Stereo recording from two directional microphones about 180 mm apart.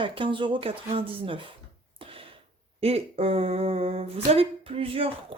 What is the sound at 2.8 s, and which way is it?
Speech, 35° right (ahead or behind).